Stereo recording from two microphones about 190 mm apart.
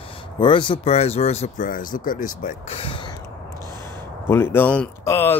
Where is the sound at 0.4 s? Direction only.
25° left (ahead or behind).